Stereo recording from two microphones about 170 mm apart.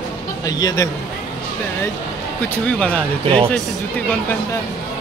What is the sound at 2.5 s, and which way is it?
Speech, 5° left (ahead or behind).